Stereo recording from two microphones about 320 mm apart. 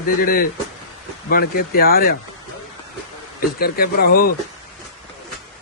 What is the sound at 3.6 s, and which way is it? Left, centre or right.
Speech, left.